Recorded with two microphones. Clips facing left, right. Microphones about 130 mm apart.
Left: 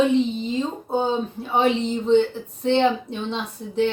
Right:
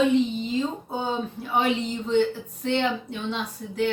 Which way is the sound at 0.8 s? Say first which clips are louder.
Left 5 dB; 25° left (ahead or behind).